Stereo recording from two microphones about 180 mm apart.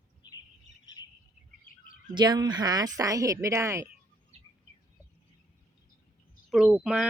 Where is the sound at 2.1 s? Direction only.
25° right (ahead or behind).